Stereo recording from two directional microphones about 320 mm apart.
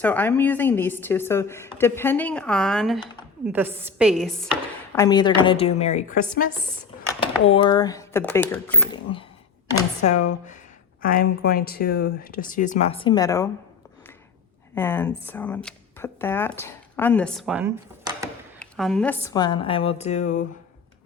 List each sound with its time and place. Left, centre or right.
0.0 s a woman's voice: centre
11.0 s speech: left; by 13.5 s centre
14.8 s a woman's voice: centre; by 20.4 s left